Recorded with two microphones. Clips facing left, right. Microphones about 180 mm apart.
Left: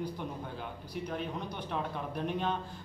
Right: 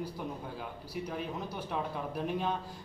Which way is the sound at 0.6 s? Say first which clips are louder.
Even; 5° right (ahead or behind).